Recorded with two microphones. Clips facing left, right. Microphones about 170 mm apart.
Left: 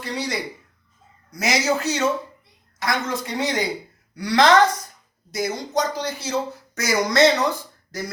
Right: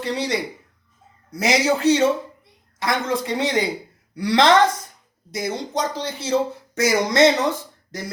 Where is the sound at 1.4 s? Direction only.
30° right (ahead or behind).